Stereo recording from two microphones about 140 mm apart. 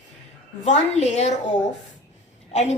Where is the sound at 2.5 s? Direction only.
50° left (ahead or behind).